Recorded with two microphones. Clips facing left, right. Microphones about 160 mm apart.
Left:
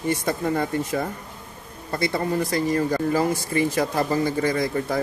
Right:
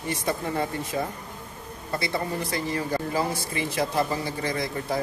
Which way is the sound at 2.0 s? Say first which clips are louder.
Left 7 dB; 50° left (ahead or behind).